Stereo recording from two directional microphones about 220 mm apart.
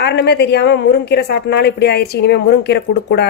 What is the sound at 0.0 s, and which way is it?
A woman's voice, 50° left (ahead or behind).